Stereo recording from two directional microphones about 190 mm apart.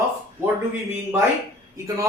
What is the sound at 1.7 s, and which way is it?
Speech, 15° right (ahead or behind).